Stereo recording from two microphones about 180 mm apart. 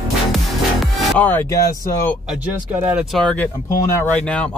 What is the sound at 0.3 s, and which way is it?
Music, centre (ahead or behind).